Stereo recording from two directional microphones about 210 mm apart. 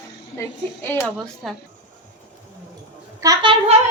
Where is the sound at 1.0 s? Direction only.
Centre (ahead or behind).